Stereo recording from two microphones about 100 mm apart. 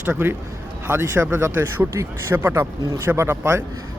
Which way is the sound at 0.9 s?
20° right (ahead or behind).